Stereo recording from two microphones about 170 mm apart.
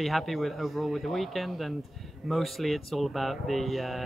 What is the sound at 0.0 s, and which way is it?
Speech, centre (ahead or behind).